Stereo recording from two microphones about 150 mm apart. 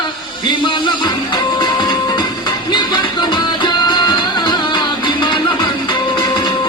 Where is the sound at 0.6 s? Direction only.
30° left (ahead or behind).